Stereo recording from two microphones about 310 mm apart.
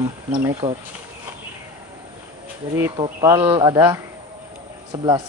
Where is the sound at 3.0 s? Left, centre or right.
Centre.